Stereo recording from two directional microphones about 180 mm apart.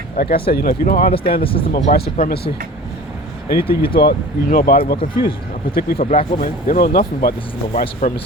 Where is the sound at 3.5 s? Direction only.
60° left (ahead or behind).